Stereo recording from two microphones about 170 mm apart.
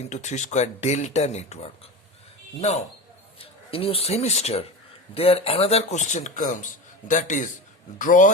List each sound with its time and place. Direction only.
0.1 s a man's voice: 45° left (ahead or behind)